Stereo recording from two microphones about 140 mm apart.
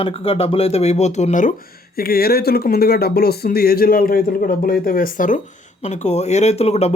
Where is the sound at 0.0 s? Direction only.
45° left (ahead or behind); by 1.5 s 65° left (ahead or behind).